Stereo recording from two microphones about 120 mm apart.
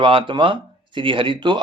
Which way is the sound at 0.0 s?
45° right (ahead or behind).